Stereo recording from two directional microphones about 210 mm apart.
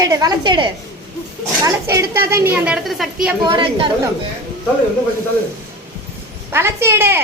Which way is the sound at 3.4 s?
20° right (ahead or behind).